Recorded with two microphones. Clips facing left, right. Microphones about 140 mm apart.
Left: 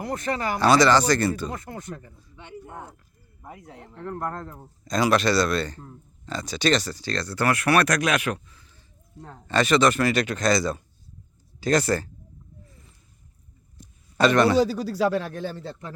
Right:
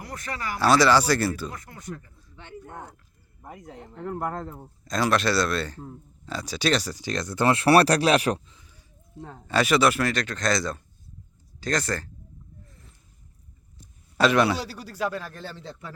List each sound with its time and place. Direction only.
0.0 s speech: 25° left (ahead or behind)
0.6 s a man's voice: 5° right (ahead or behind)
1.5 s speech: 25° left (ahead or behind)
2.3 s a man's voice: 10° left (ahead or behind); by 8.4 s 35° right (ahead or behind)
8.4 s a sound: 15° right (ahead or behind)
9.2 s a man's voice: 5° right (ahead or behind)
10.1 s speech: 10° left (ahead or behind)
14.2 s a man's voice: 5° right (ahead or behind)
14.8 s speech: 90° left
15.1 s speech: 70° left (ahead or behind)
15.4 s speech: 5° left (ahead or behind)